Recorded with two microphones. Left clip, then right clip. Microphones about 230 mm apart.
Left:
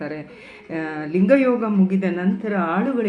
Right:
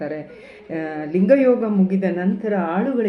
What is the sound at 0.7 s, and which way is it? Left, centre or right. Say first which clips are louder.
Speech: right 1 dB; centre.